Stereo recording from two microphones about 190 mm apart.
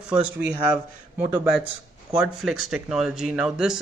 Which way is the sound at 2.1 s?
5° right (ahead or behind).